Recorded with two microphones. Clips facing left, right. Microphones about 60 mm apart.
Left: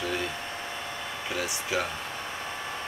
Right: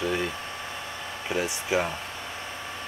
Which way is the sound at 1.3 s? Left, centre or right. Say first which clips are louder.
Right 4 dB; right.